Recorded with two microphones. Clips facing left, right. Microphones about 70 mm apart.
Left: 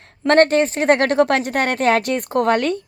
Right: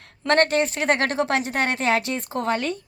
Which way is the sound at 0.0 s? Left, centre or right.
Left.